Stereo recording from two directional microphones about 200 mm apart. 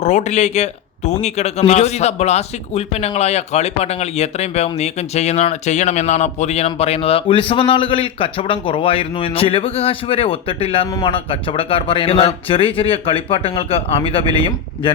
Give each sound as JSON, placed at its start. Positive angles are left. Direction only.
{"t": 0.0, "sound": "speech", "side_deg": 35}